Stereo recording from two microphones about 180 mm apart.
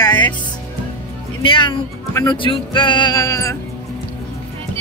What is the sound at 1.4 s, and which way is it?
Speech, 25° left (ahead or behind).